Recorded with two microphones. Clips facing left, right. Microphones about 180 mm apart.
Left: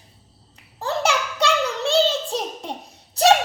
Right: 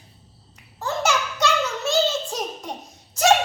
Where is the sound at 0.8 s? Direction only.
30° left (ahead or behind).